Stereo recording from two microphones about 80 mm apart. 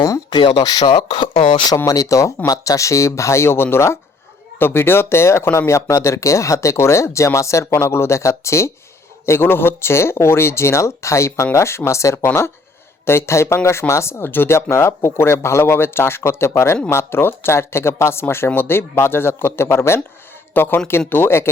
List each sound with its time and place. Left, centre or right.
0.3 s speech: left
0.5 s speech: left
1.7 s speech: left